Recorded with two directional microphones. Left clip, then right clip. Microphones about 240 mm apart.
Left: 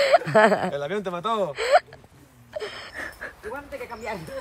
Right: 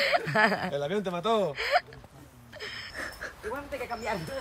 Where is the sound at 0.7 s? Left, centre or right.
Centre.